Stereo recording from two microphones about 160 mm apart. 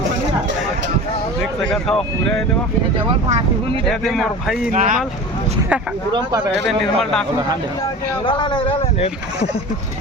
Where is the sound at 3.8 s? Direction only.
Centre (ahead or behind).